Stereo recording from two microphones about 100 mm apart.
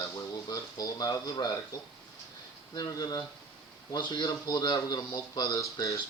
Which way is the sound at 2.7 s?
40° left (ahead or behind).